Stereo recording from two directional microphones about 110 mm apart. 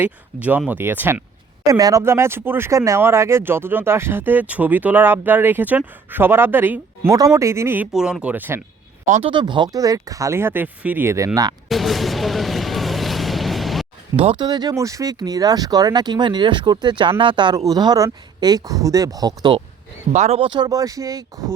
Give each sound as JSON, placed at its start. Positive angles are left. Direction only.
{"t": 0.0, "sound": "speech", "side_deg": -15}
{"t": 1.6, "sound": "speech", "side_deg": -30}
{"t": 7.9, "sound": "speech", "side_deg": -5}
{"t": 9.0, "sound": "speech", "side_deg": -90}
{"t": 9.3, "sound": "speech", "side_deg": -45}
{"t": 11.7, "sound": "vehicle", "side_deg": 0}
{"t": 14.3, "sound": "speech", "side_deg": -40}
{"t": 20.1, "sound": "speech", "side_deg": -90}
{"t": 20.4, "sound": "speech", "side_deg": -45}